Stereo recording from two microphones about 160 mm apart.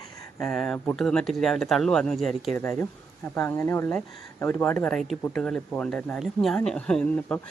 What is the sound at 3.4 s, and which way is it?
Speech, 15° left (ahead or behind).